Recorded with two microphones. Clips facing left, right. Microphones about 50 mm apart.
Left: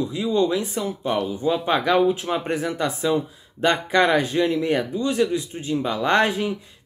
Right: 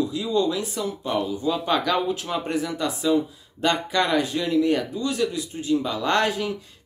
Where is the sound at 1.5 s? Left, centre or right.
Centre.